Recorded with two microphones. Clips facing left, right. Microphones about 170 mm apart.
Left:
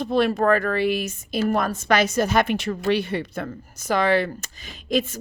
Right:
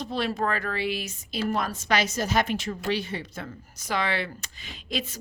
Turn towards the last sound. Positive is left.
turn(degrees=45)  # may be behind; listen again after turning